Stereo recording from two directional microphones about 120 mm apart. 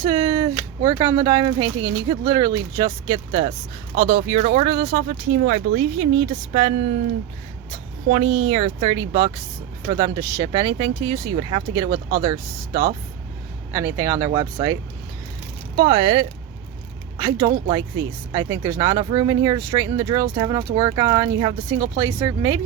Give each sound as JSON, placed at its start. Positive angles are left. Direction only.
{"t": 0.0, "sound": "speech", "side_deg": -40}
{"t": 3.9, "sound": "speech", "side_deg": -50}
{"t": 8.1, "sound": "speech", "side_deg": -50}
{"t": 13.7, "sound": "speech", "side_deg": -25}
{"t": 14.3, "sound": "speech", "side_deg": -35}